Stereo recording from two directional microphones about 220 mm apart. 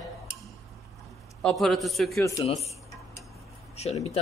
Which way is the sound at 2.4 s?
30° left (ahead or behind).